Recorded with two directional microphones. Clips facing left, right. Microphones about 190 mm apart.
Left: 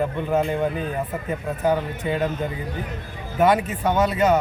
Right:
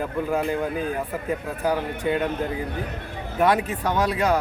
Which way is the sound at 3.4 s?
5° left (ahead or behind).